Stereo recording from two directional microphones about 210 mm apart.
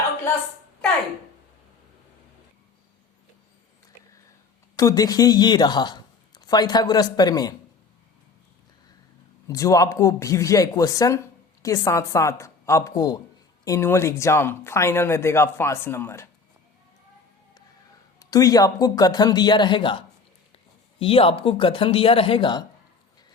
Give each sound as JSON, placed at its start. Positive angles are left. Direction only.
{"t": 4.8, "sound": "speech", "side_deg": 15}
{"t": 9.5, "sound": "speech", "side_deg": 15}
{"t": 18.2, "sound": "speech", "side_deg": 15}